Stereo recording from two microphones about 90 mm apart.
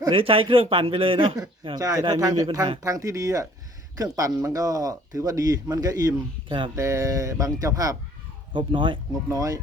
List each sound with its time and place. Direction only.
0.1 s a man's voice: 90° right
1.7 s speech: 40° right (ahead or behind)
8.5 s speech: 65° right (ahead or behind)
9.3 s speech: 40° right (ahead or behind)